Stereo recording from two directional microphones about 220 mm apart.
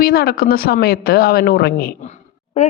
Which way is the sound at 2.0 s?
30° left (ahead or behind).